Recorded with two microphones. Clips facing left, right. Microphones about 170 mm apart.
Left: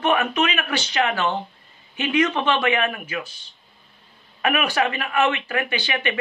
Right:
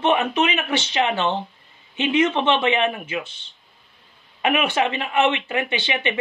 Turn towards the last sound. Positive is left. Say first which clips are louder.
# right 1 dB
turn(degrees=-25)  # may be behind; listen again after turning